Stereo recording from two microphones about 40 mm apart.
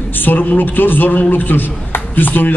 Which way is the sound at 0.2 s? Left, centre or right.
Left.